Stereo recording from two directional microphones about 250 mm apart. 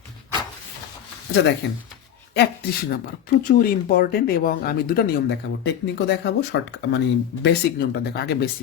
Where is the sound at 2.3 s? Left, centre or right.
Left.